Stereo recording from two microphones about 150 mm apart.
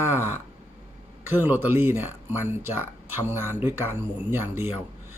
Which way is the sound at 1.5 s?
15° right (ahead or behind).